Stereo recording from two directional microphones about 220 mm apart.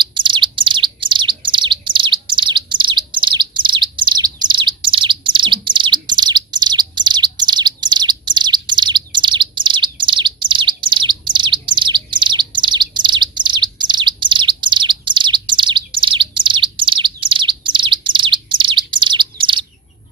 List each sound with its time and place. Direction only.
0.0 s bird: 20° right (ahead or behind)